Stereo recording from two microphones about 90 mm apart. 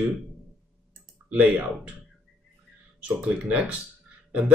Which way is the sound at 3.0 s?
15° right (ahead or behind).